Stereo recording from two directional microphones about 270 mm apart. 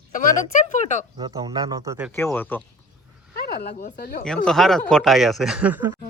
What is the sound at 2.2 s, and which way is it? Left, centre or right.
Speech, centre.